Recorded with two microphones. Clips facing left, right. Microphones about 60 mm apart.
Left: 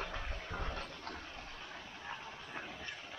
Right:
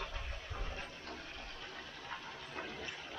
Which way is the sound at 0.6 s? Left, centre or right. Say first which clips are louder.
Left 3 dB; left.